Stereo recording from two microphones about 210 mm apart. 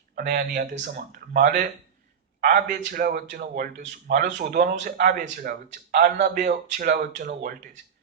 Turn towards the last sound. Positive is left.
turn(degrees=-40)  # may be behind; listen again after turning